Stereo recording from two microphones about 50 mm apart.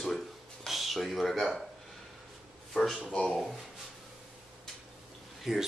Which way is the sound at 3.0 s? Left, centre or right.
Centre.